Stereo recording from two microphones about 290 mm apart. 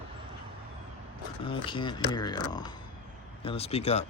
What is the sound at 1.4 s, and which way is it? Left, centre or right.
Speech, centre.